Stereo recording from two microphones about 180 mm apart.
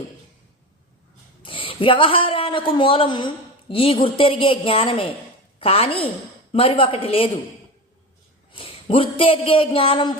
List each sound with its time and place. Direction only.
1.4 s speech: 30° left (ahead or behind)
8.5 s speech: 30° left (ahead or behind)